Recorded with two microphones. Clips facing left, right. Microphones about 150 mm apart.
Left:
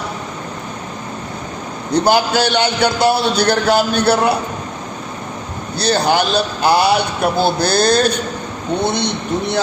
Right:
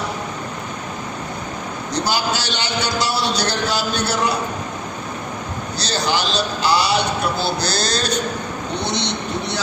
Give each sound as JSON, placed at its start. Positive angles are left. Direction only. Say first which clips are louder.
{"t": 1.9, "sound": "a man's voice", "louder": "left 8 dB", "side_deg": 55}
{"t": 5.8, "sound": "a man's voice", "louder": "left 7 dB", "side_deg": 55}